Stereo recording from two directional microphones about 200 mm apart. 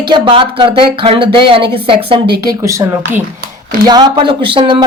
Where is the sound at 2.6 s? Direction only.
15° right (ahead or behind).